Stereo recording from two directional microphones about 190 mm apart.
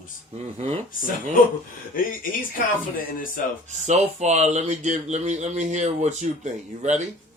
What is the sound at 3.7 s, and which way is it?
Speech, 40° right (ahead or behind).